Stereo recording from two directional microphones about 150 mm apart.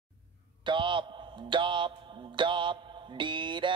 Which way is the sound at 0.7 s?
35° right (ahead or behind).